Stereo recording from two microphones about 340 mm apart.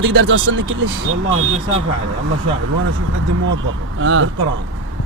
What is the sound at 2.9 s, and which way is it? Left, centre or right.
Speech, right.